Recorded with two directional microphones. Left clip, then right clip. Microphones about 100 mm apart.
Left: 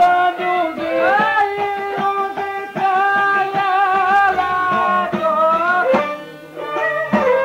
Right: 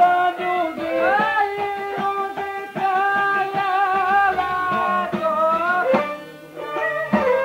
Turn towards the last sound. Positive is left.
turn(degrees=30)  # may be behind; listen again after turning